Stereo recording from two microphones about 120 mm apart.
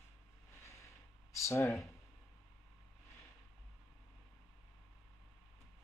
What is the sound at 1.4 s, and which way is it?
Speech, 20° left (ahead or behind).